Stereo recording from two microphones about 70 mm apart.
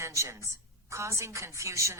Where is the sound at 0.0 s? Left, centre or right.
Right.